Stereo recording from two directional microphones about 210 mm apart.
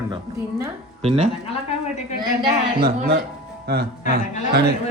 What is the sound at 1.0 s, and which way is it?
Speech, 30° right (ahead or behind).